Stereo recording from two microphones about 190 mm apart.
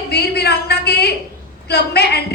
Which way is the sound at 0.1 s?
60° left (ahead or behind).